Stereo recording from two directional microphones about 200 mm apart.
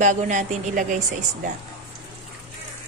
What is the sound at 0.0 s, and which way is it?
A woman's voice, 40° right (ahead or behind).